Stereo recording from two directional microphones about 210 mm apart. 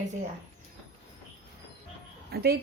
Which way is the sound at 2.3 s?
50° right (ahead or behind).